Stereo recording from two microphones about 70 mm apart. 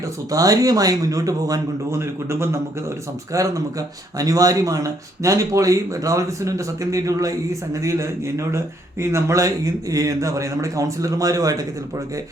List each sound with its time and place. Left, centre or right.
0.3 s speech: right
1.9 s speech: right
3.3 s speech: right